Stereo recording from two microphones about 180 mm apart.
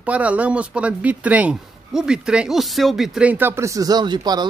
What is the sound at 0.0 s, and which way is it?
Speech, 10° right (ahead or behind).